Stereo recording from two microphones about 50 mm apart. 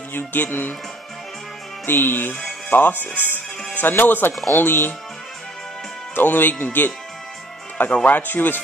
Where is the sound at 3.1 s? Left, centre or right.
Right.